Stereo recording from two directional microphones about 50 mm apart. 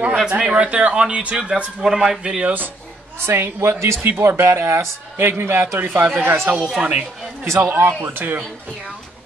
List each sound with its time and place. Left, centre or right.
0.0 s speech: right
2.4 s speech: right
3.3 s a man's voice: right
6.8 s speech: centre
7.8 s a man's voice: right